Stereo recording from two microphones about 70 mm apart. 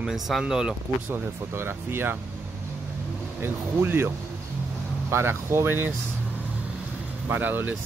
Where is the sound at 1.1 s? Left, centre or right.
Right.